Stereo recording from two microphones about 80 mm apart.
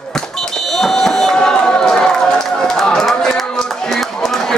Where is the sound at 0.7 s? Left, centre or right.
Centre.